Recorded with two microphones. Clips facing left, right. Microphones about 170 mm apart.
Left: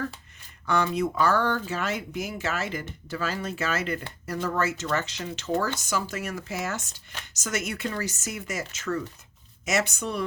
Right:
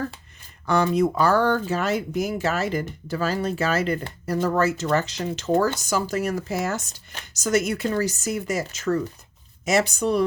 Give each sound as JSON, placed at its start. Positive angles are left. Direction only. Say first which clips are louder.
{"t": 0.6, "sound": "speech", "louder": "right 5 dB", "side_deg": -40}